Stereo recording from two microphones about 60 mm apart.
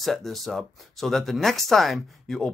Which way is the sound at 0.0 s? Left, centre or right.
Centre.